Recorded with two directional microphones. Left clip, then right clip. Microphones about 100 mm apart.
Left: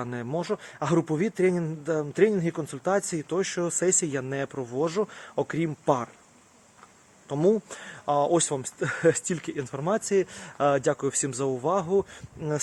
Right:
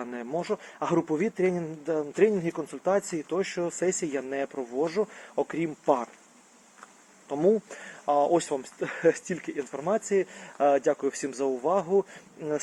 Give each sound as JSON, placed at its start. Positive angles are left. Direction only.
{"t": 0.0, "sound": "speech", "side_deg": 35}
{"t": 5.3, "sound": "speech", "side_deg": 45}
{"t": 7.3, "sound": "speech", "side_deg": 40}